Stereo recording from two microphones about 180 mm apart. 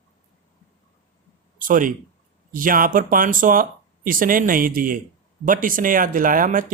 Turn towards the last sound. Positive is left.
turn(degrees=-45)  # may be behind; listen again after turning